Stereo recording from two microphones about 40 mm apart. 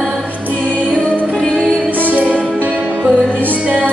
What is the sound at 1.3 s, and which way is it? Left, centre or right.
Music, centre.